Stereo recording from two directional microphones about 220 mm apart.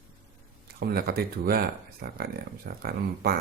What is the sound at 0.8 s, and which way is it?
Speech, 45° right (ahead or behind).